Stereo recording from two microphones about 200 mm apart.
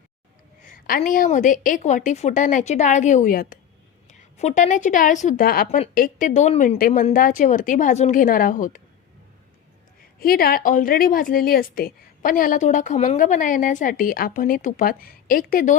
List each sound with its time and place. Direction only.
0.7 s a woman's voice: 45° left (ahead or behind)
10.2 s a woman's voice: 50° left (ahead or behind)